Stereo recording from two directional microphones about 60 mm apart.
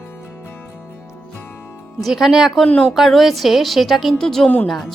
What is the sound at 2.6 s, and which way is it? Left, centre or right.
Speech, centre.